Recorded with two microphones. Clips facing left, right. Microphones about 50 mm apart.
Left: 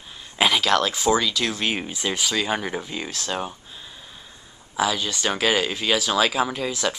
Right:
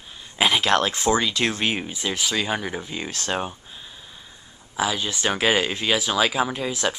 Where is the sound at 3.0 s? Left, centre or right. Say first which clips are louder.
Right 1 dB; right.